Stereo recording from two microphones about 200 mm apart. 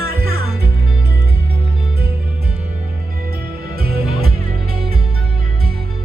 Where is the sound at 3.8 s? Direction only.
50° right (ahead or behind).